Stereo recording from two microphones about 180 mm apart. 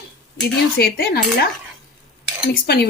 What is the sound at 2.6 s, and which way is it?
Speech, 60° left (ahead or behind).